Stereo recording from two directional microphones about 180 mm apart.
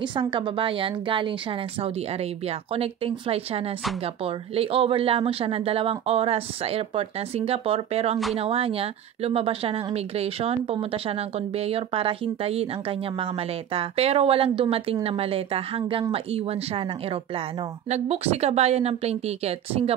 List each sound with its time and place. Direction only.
0.0 s a woman's voice: 25° right (ahead or behind)